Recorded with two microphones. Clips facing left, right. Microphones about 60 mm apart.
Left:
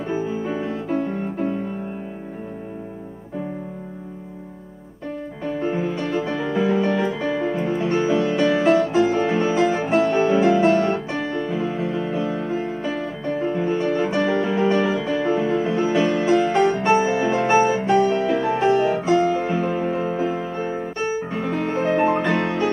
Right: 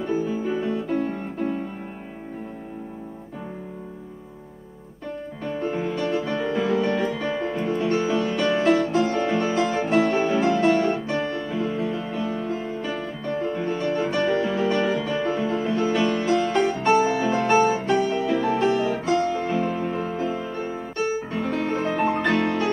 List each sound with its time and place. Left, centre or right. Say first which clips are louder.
0.1 s music: even; left
0.7 s music: left 1 dB; centre
5.8 s music: left 1 dB; centre
8.4 s music: left 2 dB; centre
12.8 s music: left 3 dB; centre
15.7 s music: left 2 dB; centre
16.0 s music: left 3 dB; centre
16.9 s music: left 2 dB; left
17.4 s music: left 1 dB; centre
20.5 s music: left 3 dB; left
21.3 s music: left 1 dB; centre
22.4 s music: left 1 dB; centre